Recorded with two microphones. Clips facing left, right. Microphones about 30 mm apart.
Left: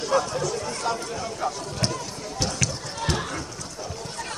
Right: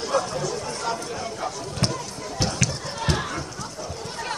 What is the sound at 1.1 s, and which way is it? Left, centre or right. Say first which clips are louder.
Speech: left 1 dB; centre.